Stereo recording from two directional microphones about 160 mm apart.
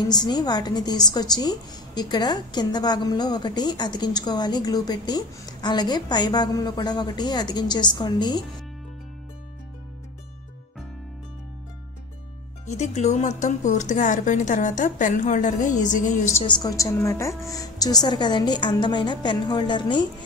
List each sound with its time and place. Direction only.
0.1 s a woman's voice: 25° left (ahead or behind)
12.6 s speech: 45° left (ahead or behind)
16.4 s a woman's voice: 25° left (ahead or behind)